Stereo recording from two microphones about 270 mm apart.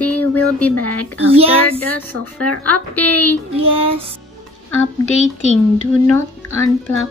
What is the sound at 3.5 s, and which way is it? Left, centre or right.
Speech, right.